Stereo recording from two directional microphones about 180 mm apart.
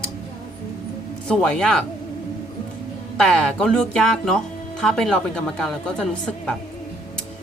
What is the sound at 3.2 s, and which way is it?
Speech, 5° left (ahead or behind).